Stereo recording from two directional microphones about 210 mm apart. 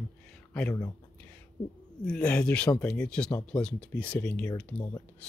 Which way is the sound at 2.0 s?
5° left (ahead or behind).